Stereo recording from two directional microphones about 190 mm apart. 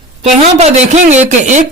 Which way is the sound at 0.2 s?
35° right (ahead or behind).